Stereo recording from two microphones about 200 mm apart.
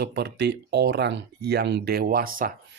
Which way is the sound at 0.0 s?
55° right (ahead or behind).